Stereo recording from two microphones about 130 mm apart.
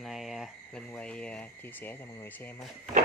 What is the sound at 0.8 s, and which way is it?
Speech, 10° left (ahead or behind).